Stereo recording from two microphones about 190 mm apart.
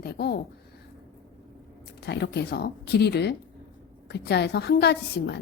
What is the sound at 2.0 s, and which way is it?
Speech, 60° left (ahead or behind).